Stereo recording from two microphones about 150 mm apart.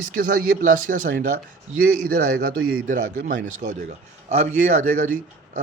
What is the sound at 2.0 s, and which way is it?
A man's voice, 75° right (ahead or behind).